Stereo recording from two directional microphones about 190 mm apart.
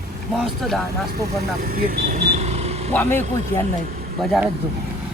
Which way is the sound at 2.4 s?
35° right (ahead or behind).